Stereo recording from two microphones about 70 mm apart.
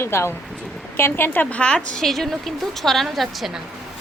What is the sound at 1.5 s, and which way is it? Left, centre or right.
Speech, centre.